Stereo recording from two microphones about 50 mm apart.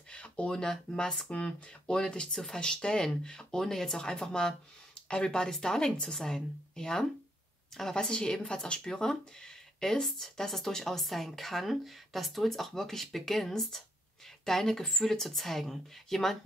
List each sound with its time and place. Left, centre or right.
0.1 s speech: left; by 16.3 s centre